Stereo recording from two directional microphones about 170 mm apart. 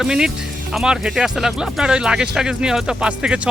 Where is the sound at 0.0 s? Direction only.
5° right (ahead or behind).